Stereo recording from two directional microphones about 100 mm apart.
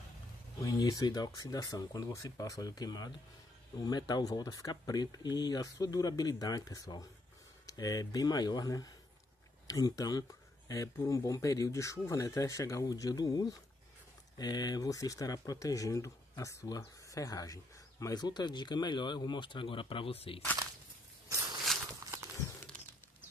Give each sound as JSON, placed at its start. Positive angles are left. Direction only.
{"t": 0.6, "sound": "speech", "side_deg": 35}